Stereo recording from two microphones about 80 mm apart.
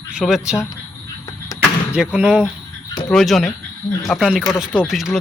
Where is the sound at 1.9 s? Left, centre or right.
Centre.